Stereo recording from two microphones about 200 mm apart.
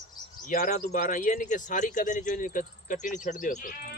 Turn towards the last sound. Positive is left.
turn(degrees=40)  # may be behind; listen again after turning